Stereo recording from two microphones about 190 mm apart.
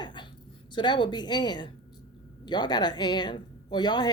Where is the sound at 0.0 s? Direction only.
25° left (ahead or behind).